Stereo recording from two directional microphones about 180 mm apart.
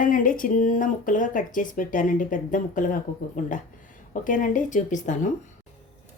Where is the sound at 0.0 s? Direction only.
50° left (ahead or behind).